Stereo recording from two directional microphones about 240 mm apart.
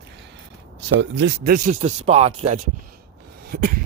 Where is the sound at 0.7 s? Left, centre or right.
Right.